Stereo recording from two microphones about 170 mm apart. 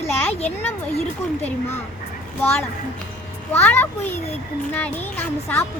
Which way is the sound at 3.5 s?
10° left (ahead or behind).